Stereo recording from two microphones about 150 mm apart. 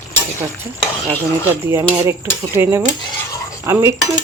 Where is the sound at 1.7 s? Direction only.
20° right (ahead or behind).